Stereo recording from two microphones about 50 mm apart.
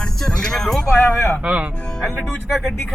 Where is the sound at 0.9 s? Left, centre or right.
Left.